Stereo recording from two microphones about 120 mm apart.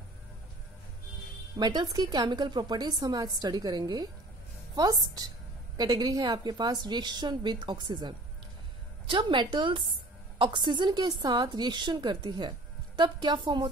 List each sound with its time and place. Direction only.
1.6 s a woman's voice: 35° right (ahead or behind)
5.8 s a woman's voice: 35° right (ahead or behind)
9.1 s a woman's voice: 40° right (ahead or behind)